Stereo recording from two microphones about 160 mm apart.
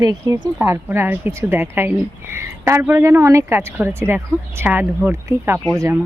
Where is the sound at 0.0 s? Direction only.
25° right (ahead or behind).